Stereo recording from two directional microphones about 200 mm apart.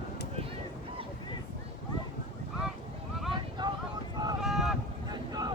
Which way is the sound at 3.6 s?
20° right (ahead or behind).